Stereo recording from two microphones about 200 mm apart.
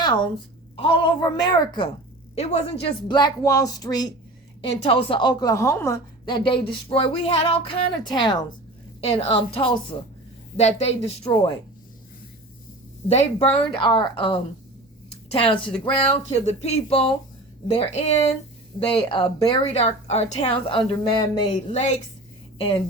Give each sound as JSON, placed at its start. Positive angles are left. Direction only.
{"t": 0.0, "sound": "a woman's voice", "side_deg": 20}
{"t": 2.3, "sound": "a woman's voice", "side_deg": 30}
{"t": 10.6, "sound": "a sound", "side_deg": 30}
{"t": 13.1, "sound": "a woman's voice", "side_deg": 30}
{"t": 15.8, "sound": "a sound", "side_deg": 30}
{"t": 18.9, "sound": "a woman's voice", "side_deg": 25}